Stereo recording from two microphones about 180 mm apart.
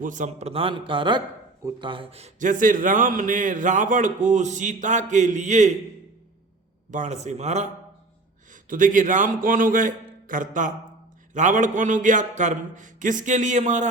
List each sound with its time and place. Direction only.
0.0 s a man's voice: 45° right (ahead or behind)
6.9 s a man's voice: 40° right (ahead or behind)
8.7 s a man's voice: 45° right (ahead or behind)